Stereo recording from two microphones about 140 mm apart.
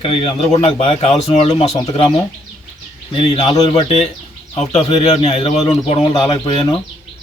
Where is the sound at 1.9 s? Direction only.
35° left (ahead or behind).